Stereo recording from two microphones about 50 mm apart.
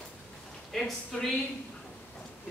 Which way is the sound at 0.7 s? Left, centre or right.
Centre.